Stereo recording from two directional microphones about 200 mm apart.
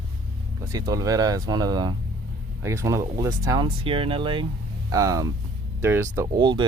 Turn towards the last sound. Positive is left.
turn(degrees=-20)  # may be behind; listen again after turning